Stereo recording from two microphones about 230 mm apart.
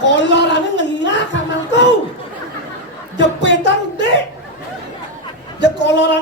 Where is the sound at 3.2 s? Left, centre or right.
Left.